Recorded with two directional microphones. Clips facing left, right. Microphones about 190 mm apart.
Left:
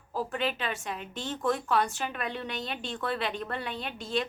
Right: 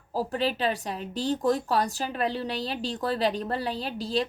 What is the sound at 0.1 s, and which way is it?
A woman's voice, 35° right (ahead or behind).